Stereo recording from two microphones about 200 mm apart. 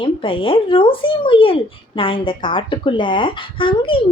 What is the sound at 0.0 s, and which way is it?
Speech, 25° left (ahead or behind).